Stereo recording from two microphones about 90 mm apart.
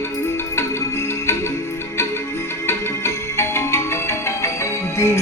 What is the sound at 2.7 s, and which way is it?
Music, 30° left (ahead or behind).